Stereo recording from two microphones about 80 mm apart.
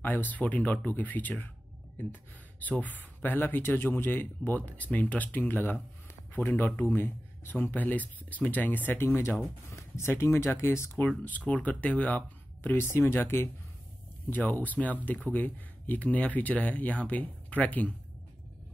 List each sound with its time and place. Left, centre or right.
0.0 s speech: left
2.8 s speech: left
11.0 s speech: left
12.9 s speech: left